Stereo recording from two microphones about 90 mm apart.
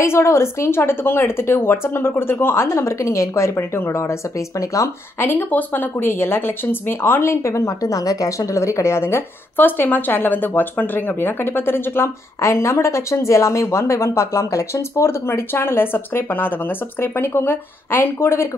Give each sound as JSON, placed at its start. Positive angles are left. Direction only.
{"t": 0.0, "sound": "speech", "side_deg": 30}
{"t": 5.2, "sound": "speech", "side_deg": 20}